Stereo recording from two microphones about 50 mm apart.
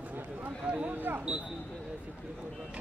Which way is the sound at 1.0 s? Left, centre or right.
Right.